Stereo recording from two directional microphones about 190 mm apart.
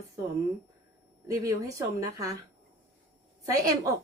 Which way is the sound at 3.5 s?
20° right (ahead or behind).